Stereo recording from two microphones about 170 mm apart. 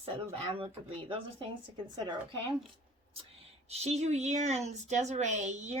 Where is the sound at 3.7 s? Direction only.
40° right (ahead or behind).